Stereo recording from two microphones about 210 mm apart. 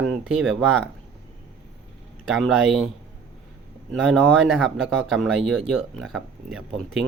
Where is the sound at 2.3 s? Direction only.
Centre (ahead or behind).